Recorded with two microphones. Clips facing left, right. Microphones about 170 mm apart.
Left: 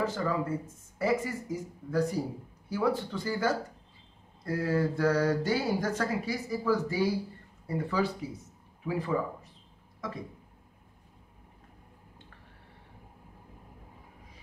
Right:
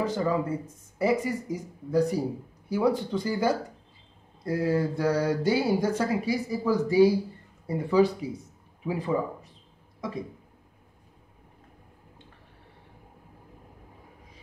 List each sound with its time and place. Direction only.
0.0 s speech: 15° right (ahead or behind)